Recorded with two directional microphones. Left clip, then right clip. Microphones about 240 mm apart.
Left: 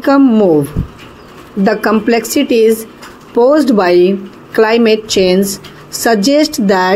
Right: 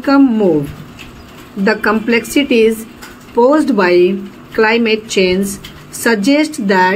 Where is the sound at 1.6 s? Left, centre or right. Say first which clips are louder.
Left 1 dB; centre.